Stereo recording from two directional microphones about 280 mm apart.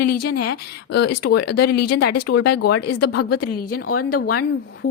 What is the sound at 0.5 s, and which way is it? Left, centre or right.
A woman's voice, left.